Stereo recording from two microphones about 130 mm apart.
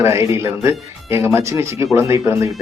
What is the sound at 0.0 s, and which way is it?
A man's voice, 20° right (ahead or behind).